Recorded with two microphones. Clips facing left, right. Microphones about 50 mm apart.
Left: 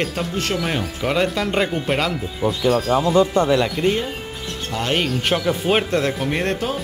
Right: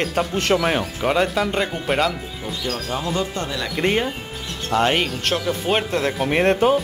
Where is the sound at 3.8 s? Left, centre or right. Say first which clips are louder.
Even; right.